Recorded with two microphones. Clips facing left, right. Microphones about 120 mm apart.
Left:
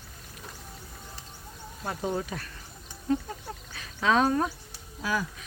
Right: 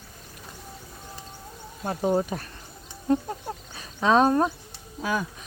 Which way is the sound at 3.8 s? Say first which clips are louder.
Right 4 dB; 30° right (ahead or behind).